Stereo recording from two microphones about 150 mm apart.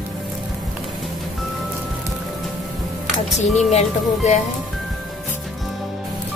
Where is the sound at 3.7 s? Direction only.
45° left (ahead or behind).